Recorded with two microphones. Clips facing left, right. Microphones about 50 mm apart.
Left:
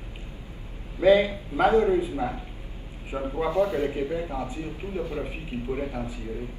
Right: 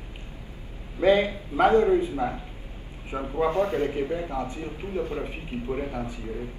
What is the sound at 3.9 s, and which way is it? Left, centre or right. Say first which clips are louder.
Speech: right 1 dB; right.